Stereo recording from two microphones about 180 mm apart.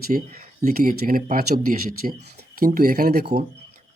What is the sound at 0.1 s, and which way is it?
Speech, 40° right (ahead or behind).